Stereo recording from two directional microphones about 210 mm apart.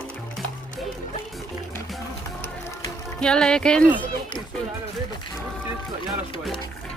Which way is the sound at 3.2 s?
5° left (ahead or behind).